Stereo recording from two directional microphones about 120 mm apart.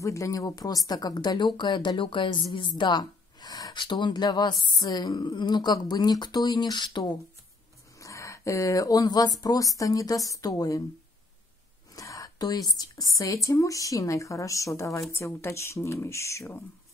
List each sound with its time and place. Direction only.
0.0 s speech: 25° left (ahead or behind)
8.0 s a woman's voice: 25° left (ahead or behind)
11.9 s a woman's voice: 30° left (ahead or behind)